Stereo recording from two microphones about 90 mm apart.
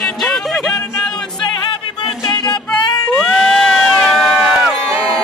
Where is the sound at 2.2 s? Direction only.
55° left (ahead or behind).